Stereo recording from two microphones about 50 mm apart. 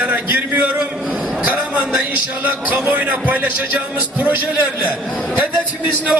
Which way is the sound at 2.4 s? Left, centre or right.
Right.